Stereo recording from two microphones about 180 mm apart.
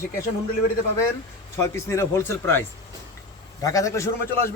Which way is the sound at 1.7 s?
15° left (ahead or behind).